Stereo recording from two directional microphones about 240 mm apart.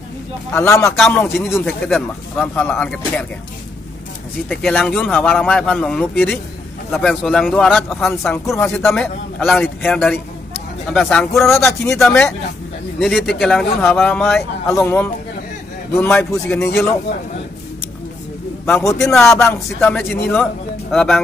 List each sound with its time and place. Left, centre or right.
0.5 s a man's voice: centre
4.5 s a man's voice: centre
18.7 s a man's voice: centre